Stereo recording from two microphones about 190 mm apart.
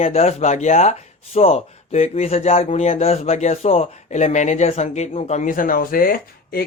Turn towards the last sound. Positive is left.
turn(degrees=50)  # may be behind; listen again after turning